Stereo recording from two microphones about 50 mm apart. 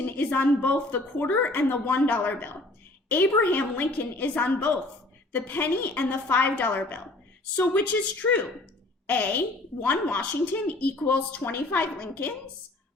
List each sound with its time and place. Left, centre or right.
0.0 s a woman's voice: left
7.8 s a woman's voice: left